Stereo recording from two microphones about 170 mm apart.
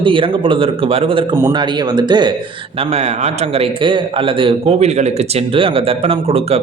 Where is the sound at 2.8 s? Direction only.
40° right (ahead or behind).